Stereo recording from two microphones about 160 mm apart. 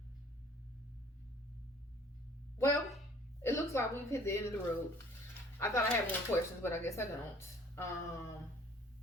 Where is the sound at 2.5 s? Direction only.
15° left (ahead or behind).